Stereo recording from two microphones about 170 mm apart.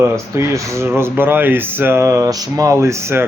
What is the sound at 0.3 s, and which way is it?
Speech, 15° right (ahead or behind).